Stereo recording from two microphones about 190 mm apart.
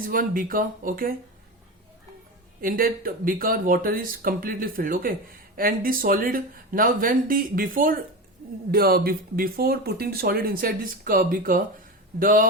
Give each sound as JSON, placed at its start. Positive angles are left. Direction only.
{"t": 0.0, "sound": "speech", "side_deg": -50}
{"t": 2.6, "sound": "speech", "side_deg": -50}